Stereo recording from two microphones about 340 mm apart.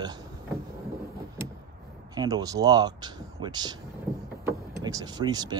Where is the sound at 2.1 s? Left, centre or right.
Centre.